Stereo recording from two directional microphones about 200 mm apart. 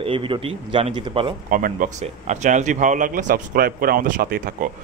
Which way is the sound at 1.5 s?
45° right (ahead or behind).